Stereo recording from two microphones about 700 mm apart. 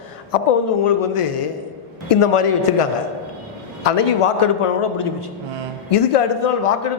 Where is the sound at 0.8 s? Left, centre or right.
Left.